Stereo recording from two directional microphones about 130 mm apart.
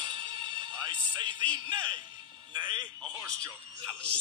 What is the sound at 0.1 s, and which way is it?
Music, 40° right (ahead or behind).